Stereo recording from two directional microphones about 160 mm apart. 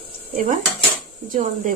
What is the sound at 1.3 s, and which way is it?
Speech, 55° right (ahead or behind).